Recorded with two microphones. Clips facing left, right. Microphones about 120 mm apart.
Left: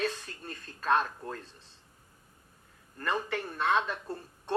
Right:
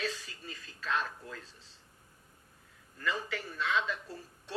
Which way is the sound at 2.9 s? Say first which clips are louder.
Left 4 dB; 55° left (ahead or behind).